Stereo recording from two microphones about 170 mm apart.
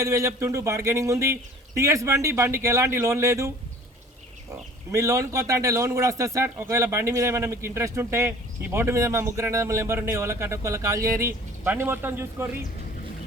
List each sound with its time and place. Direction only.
0.0 s a man's voice: 15° right (ahead or behind)
4.9 s a man's voice: 20° right (ahead or behind)